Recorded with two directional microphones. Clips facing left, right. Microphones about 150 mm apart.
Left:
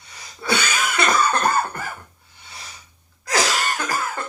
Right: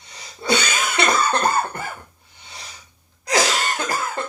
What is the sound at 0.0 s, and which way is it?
Cough, 20° right (ahead or behind).